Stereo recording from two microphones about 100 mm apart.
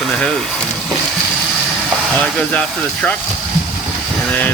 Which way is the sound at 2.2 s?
10° left (ahead or behind).